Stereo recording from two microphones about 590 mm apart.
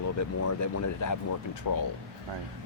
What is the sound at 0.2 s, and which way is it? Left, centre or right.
Speech, left.